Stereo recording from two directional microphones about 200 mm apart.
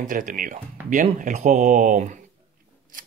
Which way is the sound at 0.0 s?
40° right (ahead or behind).